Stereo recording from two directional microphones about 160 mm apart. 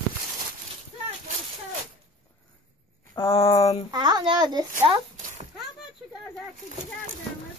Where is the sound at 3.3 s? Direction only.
35° left (ahead or behind).